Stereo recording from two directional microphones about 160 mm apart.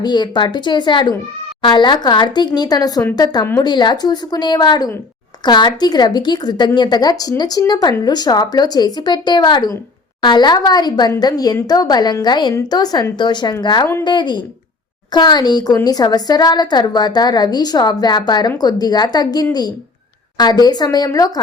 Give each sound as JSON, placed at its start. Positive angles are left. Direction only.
{"t": 0.0, "sound": "a woman's voice", "side_deg": 25}